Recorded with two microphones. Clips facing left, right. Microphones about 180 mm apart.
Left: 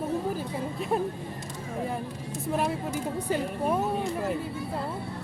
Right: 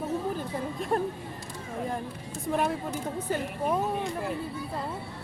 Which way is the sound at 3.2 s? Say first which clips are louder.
Left 2 dB; 10° left (ahead or behind).